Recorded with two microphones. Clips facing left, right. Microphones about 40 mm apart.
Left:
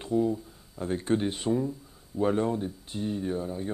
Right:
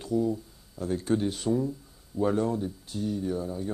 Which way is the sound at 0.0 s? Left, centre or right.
Left.